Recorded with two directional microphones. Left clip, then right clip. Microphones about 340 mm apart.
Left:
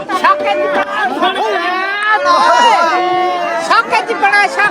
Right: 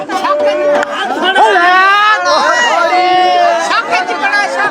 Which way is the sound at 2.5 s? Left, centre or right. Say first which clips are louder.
Left 2 dB; centre.